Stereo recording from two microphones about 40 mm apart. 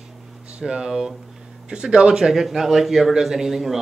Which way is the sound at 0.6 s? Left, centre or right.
Centre.